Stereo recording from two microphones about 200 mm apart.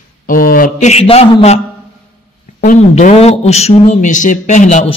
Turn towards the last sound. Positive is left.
turn(degrees=35)  # may be behind; listen again after turning